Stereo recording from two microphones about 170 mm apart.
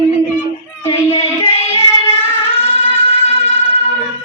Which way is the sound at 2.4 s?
35° left (ahead or behind).